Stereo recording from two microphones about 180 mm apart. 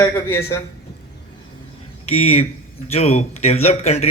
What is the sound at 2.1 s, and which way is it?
Speech, 35° left (ahead or behind).